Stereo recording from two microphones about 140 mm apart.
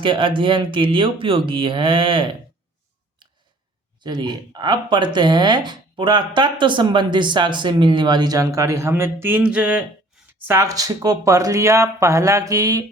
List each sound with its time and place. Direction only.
0.0 s speech: 35° right (ahead or behind)
4.0 s speech: 30° right (ahead or behind)